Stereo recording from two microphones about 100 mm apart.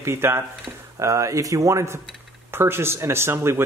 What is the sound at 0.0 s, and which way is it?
Speech, 25° right (ahead or behind).